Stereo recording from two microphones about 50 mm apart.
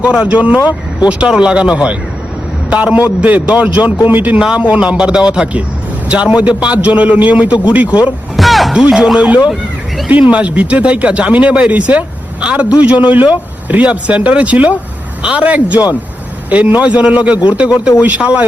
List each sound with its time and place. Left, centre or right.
0.0 s a man's voice: right
4.1 s speech: right
4.4 s a man's voice: centre
8.4 s music: centre
8.7 s a man's voice: centre